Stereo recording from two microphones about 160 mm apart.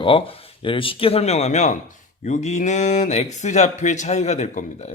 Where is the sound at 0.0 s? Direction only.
35° left (ahead or behind).